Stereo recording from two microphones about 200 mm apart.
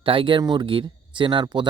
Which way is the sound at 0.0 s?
25° right (ahead or behind).